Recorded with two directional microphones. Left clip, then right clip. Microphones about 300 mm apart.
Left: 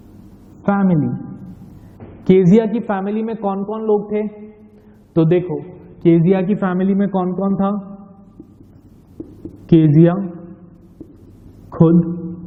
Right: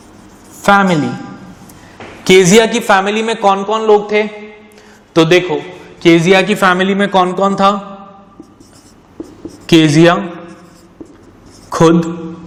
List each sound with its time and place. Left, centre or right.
0.6 s a man's voice: centre
9.6 s a man's voice: centre
11.9 s a man's voice: centre